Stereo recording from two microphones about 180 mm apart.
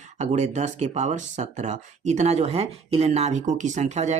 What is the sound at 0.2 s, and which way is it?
Speech, 40° right (ahead or behind).